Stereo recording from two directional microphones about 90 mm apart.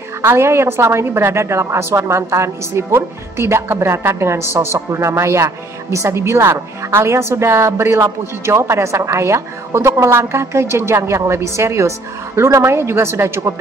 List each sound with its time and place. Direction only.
0.2 s a woman's voice: 30° right (ahead or behind)